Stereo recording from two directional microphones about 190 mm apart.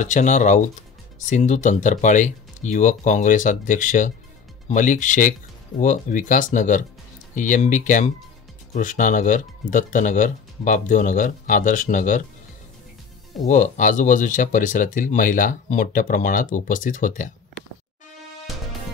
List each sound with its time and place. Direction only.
0.0 s speech: 40° left (ahead or behind)
13.5 s speech: 40° left (ahead or behind)